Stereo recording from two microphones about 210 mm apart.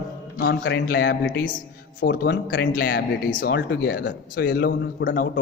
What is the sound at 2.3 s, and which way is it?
Speech, 55° left (ahead or behind).